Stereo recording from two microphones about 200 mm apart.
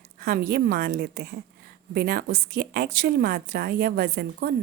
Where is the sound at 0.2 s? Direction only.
50° right (ahead or behind).